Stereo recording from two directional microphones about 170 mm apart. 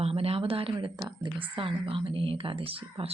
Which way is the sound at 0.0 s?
35° right (ahead or behind).